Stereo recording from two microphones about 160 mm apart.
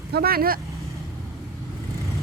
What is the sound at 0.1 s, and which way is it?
Speech, 70° right (ahead or behind).